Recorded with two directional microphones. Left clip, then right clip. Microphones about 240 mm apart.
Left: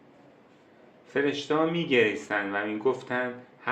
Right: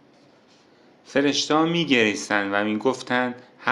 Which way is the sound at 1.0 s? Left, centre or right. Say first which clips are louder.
Right 6 dB; right.